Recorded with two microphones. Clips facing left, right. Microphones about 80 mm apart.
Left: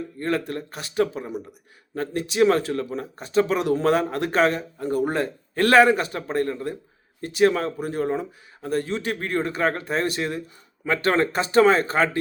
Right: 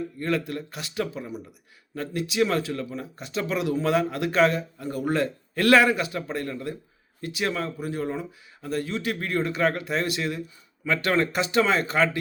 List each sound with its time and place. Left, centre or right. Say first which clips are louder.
0.2 s speech: left 2 dB; left